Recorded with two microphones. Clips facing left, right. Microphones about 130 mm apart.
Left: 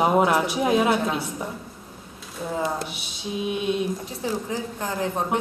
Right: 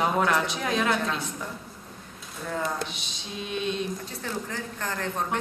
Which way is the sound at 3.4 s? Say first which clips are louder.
Left 5 dB; 10° left (ahead or behind).